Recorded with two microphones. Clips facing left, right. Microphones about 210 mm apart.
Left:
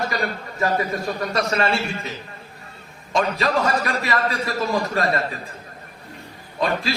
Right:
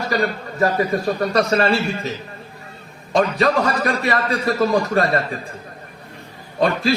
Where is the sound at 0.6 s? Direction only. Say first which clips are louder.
Right 4 dB; 35° right (ahead or behind).